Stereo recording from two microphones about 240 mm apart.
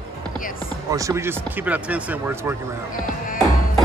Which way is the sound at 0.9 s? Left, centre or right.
Centre.